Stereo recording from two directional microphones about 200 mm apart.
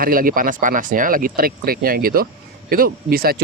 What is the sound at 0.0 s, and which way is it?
Speech, 45° right (ahead or behind).